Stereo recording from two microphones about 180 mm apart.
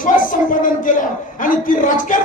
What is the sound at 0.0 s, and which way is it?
A man's voice, 50° left (ahead or behind).